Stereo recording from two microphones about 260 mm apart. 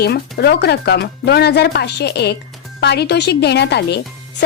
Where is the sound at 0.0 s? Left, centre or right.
Left.